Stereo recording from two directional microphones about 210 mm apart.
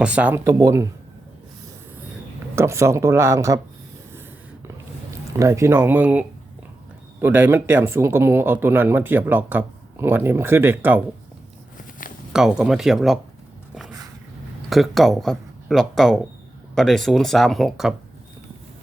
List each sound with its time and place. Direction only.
0.0 s speech: 5° right (ahead or behind)
2.6 s speech: 15° right (ahead or behind)
5.3 s speech: 15° right (ahead or behind)
12.3 s speech: 5° right (ahead or behind)
14.7 s speech: centre (ahead or behind)